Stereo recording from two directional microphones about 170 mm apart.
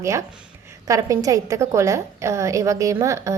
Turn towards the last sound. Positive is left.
turn(degrees=-15)  # may be behind; listen again after turning